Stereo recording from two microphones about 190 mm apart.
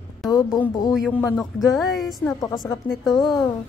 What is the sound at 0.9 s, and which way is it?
A woman's voice, centre (ahead or behind).